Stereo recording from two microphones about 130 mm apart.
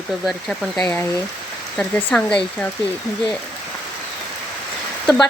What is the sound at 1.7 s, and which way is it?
Speech, 15° left (ahead or behind).